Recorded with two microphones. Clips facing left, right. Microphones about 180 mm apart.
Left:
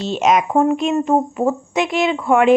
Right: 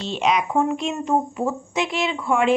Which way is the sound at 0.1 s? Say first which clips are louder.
Left 5 dB; 45° left (ahead or behind).